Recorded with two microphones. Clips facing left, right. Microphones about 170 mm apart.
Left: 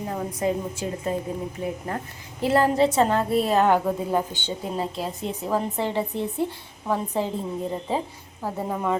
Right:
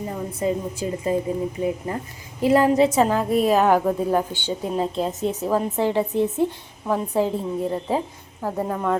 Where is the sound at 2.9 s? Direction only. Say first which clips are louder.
Right 2 dB; 5° right (ahead or behind).